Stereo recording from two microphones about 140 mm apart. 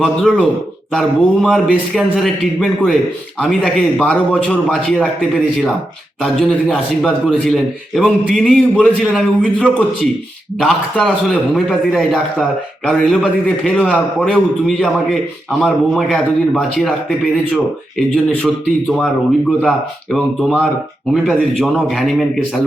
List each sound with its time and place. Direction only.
0.0 s a man's voice: 5° left (ahead or behind)
18.4 s a man's voice: 5° left (ahead or behind)
20.1 s a man's voice: centre (ahead or behind)